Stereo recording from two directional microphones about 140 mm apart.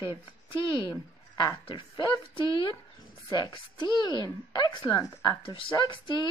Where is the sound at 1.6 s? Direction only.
35° left (ahead or behind).